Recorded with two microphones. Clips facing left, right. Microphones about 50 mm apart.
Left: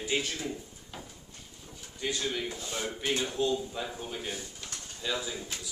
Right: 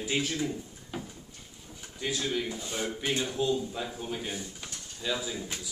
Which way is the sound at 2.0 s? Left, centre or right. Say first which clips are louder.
Right 1 dB; centre.